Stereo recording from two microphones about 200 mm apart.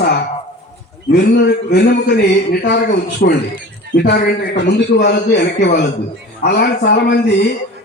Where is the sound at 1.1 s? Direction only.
55° left (ahead or behind).